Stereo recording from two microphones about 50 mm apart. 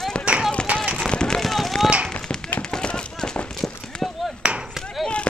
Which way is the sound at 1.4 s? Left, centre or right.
Centre.